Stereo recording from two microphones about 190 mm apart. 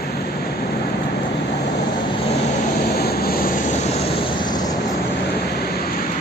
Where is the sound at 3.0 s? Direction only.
55° left (ahead or behind).